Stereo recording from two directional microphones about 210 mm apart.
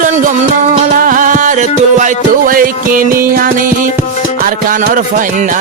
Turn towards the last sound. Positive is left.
turn(degrees=-40)  # may be behind; listen again after turning